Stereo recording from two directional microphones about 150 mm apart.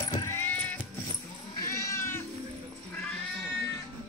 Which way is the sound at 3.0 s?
5° left (ahead or behind).